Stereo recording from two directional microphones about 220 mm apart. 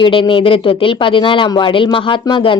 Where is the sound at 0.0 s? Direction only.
25° left (ahead or behind).